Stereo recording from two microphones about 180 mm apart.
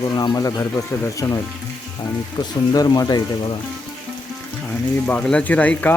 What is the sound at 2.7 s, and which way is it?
Speech, 20° left (ahead or behind).